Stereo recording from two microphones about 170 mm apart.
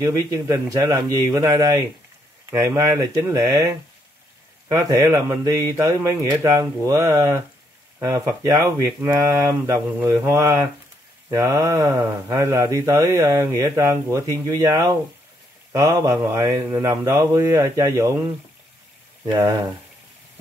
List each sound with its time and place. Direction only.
0.0 s speech: 20° right (ahead or behind)